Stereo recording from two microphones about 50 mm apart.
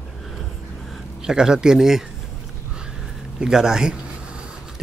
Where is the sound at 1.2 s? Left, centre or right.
Centre.